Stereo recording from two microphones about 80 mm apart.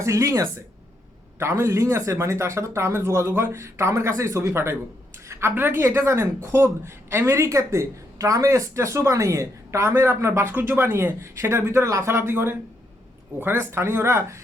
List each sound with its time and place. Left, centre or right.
0.0 s a woman's voice: right
5.3 s a sound: right
5.5 s a woman's voice: right